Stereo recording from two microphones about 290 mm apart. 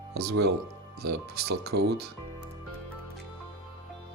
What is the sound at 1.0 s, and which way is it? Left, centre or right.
Speech, right.